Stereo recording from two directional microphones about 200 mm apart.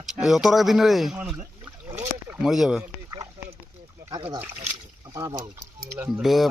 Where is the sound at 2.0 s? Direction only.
5° right (ahead or behind).